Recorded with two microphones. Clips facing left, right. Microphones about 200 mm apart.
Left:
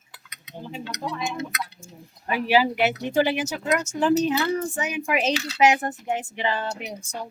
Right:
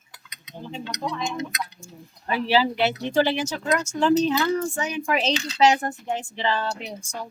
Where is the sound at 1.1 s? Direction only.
5° left (ahead or behind).